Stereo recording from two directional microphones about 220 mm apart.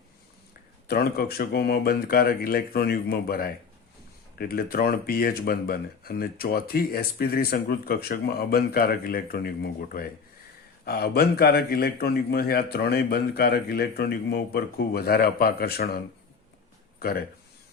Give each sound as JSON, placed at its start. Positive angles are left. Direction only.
{"t": 0.9, "sound": "speech", "side_deg": 45}
{"t": 17.0, "sound": "speech", "side_deg": 45}